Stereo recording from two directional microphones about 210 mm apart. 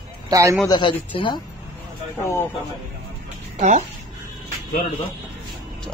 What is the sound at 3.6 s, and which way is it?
Speech, 35° right (ahead or behind).